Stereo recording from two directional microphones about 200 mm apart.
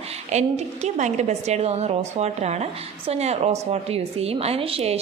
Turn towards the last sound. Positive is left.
turn(degrees=-30)  # may be behind; listen again after turning